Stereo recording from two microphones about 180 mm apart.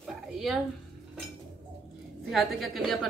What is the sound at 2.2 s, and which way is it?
Speech, centre (ahead or behind).